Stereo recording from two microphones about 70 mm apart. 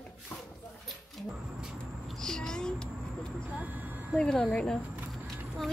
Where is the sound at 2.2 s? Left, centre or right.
Centre.